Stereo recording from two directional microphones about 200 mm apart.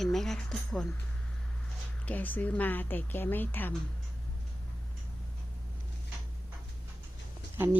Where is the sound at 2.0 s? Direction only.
10° left (ahead or behind).